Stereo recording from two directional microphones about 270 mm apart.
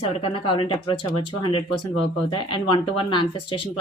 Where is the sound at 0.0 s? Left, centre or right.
Centre.